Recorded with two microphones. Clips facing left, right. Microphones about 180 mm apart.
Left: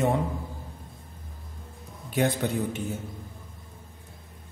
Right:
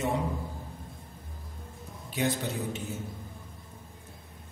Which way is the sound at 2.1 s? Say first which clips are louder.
Left 5 dB; 55° left (ahead or behind).